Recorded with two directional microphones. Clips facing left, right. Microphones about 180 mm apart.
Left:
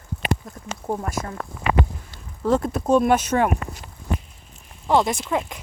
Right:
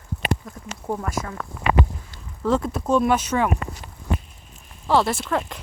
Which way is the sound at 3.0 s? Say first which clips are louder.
Left 1 dB; 50° left (ahead or behind).